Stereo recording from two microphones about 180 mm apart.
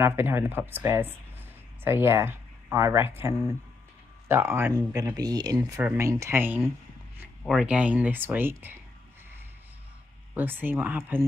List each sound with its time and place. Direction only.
0.0 s speech: 15° right (ahead or behind)
10.3 s speech: 10° right (ahead or behind)